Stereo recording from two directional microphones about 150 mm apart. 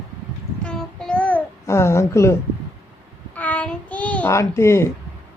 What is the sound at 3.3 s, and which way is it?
Child singing, 10° left (ahead or behind).